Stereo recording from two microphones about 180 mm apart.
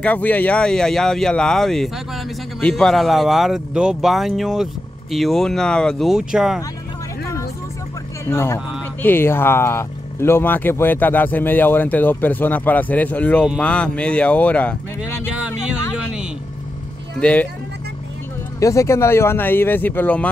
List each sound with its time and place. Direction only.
0.0 s speech: 10° left (ahead or behind)
8.3 s speech: 15° left (ahead or behind)
15.3 s music: 5° right (ahead or behind)
17.2 s speech: 10° left (ahead or behind)
18.6 s speech: 15° left (ahead or behind)